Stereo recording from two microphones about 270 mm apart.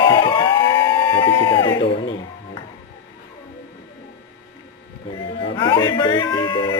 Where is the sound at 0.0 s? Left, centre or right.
Centre.